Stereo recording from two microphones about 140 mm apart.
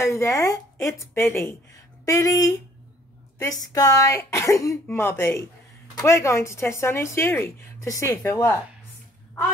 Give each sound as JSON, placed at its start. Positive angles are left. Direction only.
{"t": 0.0, "sound": "a woman's voice", "side_deg": 20}